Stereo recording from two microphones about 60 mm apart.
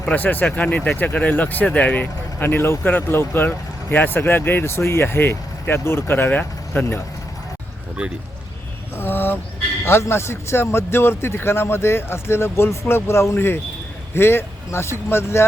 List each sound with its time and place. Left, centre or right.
0.1 s speech: left
2.4 s speech: left
9.0 s a sound: left
9.8 s a man's voice: left